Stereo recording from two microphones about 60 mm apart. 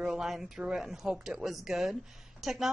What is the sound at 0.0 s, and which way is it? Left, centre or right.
A woman's voice, centre.